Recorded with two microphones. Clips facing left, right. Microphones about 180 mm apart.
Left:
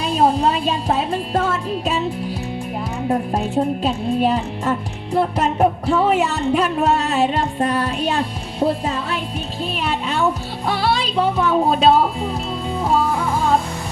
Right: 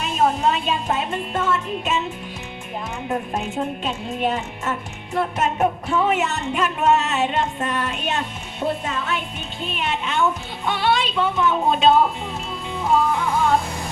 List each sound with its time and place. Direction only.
0.0 s music: 35° left (ahead or behind)
3.1 s music: 35° left (ahead or behind)